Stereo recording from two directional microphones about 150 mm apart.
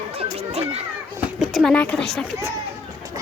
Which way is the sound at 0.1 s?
45° right (ahead or behind).